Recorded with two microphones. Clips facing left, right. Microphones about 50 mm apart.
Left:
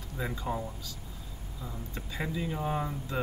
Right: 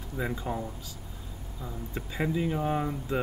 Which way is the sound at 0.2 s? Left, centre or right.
Centre.